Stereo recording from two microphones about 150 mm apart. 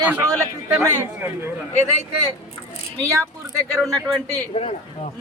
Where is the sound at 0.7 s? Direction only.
15° right (ahead or behind).